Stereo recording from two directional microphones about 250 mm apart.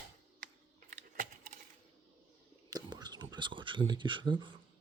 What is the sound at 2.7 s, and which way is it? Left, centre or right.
Whispering, centre.